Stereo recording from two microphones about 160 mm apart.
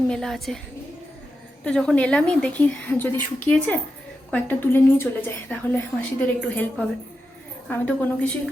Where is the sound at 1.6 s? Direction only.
5° left (ahead or behind).